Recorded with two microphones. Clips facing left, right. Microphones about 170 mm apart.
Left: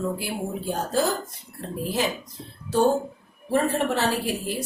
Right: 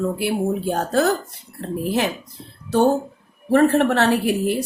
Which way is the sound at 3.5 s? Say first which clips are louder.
Right 7 dB; 65° right (ahead or behind).